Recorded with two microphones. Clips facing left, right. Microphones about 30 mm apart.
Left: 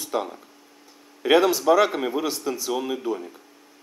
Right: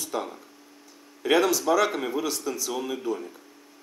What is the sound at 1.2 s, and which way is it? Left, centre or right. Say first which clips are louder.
Speech: left 3 dB; centre.